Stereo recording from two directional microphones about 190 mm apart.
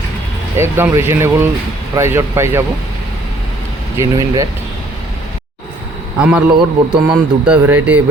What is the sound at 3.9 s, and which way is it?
Speech, 20° right (ahead or behind).